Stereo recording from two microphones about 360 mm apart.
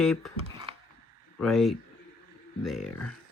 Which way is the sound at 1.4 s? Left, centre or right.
Centre.